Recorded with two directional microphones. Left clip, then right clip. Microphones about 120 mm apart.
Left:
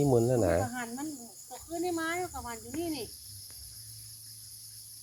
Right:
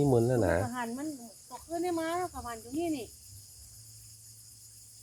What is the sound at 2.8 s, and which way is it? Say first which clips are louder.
Speech: right 2 dB; 25° left (ahead or behind).